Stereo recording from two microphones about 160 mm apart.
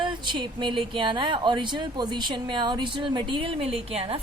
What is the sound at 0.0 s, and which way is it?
Speech, 30° right (ahead or behind).